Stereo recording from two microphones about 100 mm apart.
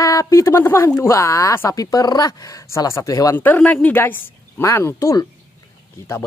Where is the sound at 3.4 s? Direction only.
15° left (ahead or behind).